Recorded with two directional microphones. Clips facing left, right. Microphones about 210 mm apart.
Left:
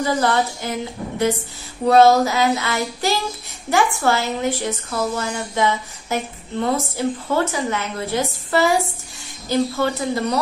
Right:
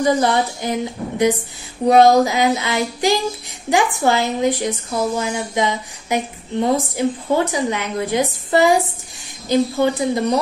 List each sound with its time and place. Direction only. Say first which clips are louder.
0.0 s speech: right 3 dB; 15° right (ahead or behind)